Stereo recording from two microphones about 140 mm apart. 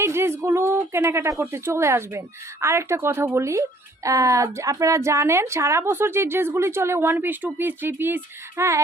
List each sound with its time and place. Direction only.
0.0 s a woman's voice: 20° right (ahead or behind)